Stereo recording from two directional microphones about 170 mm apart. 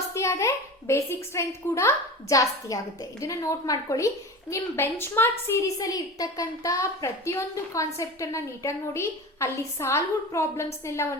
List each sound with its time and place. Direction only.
0.1 s a woman's voice: 15° left (ahead or behind)